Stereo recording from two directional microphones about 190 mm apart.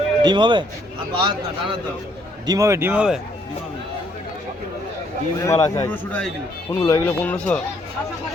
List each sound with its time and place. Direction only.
0.2 s a man's voice: 25° right (ahead or behind)
2.5 s a man's voice: 15° right (ahead or behind)
5.4 s a man's voice: 15° left (ahead or behind)
6.7 s a man's voice: 15° left (ahead or behind)